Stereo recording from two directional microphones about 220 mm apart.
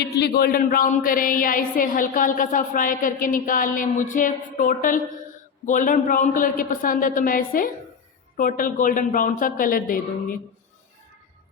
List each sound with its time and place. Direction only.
0.0 s speech: 45° left (ahead or behind)